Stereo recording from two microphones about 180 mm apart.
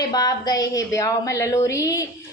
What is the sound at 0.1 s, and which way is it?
A woman's voice, 20° left (ahead or behind).